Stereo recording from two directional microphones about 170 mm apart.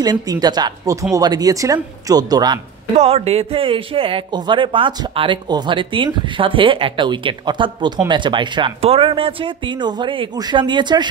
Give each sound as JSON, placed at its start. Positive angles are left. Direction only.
{"t": 0.0, "sound": "speech", "side_deg": -25}
{"t": 3.0, "sound": "speech", "side_deg": -35}